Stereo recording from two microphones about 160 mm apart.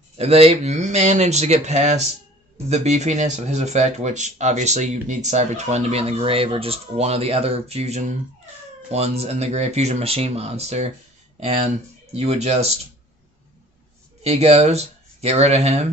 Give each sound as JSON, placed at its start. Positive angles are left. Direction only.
{"t": 0.2, "sound": "speech", "side_deg": -40}
{"t": 14.2, "sound": "speech", "side_deg": -40}